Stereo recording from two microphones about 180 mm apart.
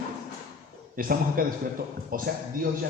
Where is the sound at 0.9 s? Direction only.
55° right (ahead or behind).